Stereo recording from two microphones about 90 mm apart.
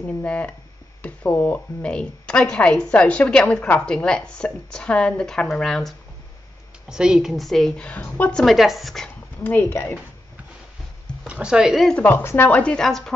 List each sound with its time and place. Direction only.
0.2 s speech: 15° left (ahead or behind)
6.9 s a woman's voice: 10° right (ahead or behind); by 8.5 s 10° left (ahead or behind)
8.5 s a woman's voice: centre (ahead or behind)
9.4 s speech: 20° left (ahead or behind)
11.2 s speech: 10° right (ahead or behind)
11.9 s speech: 20° left (ahead or behind)